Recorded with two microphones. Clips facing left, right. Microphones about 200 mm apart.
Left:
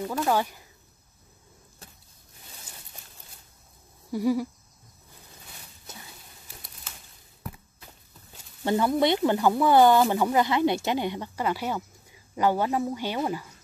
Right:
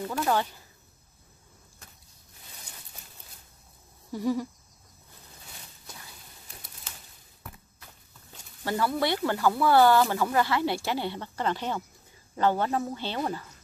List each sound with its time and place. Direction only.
0.0 s speech: 10° left (ahead or behind)
4.1 s speech: 10° left (ahead or behind)
8.6 s speech: 20° left (ahead or behind)